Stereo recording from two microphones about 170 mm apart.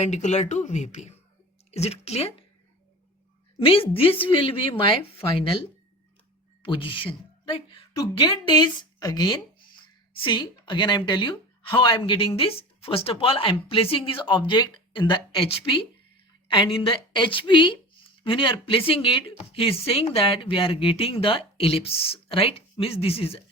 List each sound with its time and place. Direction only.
0.0 s speech: 45° left (ahead or behind)
3.6 s speech: 35° left (ahead or behind)
6.6 s a woman's voice: 30° left (ahead or behind)